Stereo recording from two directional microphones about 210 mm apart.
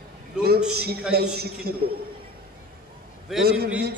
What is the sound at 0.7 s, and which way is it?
A man's voice, 50° right (ahead or behind).